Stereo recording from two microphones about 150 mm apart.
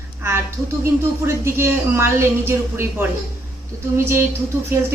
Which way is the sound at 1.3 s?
15° right (ahead or behind).